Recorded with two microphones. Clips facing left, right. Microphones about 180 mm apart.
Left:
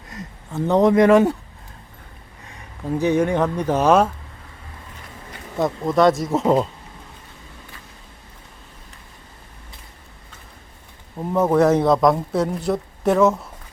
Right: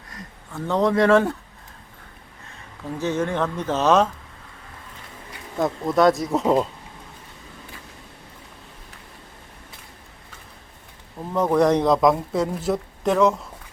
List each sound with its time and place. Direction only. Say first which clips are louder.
0.1 s speech: left 6 dB; 20° left (ahead or behind)
3.0 s speech: left 5 dB; 15° left (ahead or behind)
5.5 s speech: left 2 dB; centre (ahead or behind)
11.3 s speech: left 2 dB; 5° left (ahead or behind)